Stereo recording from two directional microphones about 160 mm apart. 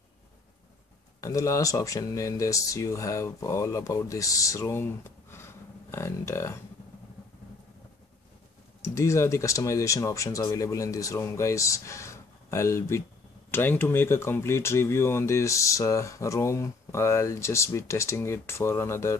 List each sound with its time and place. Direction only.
1.2 s speech: 20° left (ahead or behind)
8.8 s speech: 20° left (ahead or behind)